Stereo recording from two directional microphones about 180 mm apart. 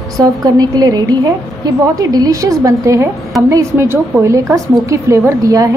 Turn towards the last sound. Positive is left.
turn(degrees=-20)  # may be behind; listen again after turning